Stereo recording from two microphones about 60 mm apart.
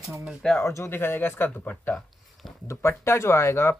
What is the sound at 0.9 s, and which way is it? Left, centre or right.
Speech, left.